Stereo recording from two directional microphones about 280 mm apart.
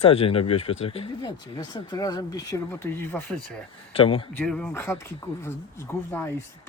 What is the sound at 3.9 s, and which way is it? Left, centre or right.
Speech, centre.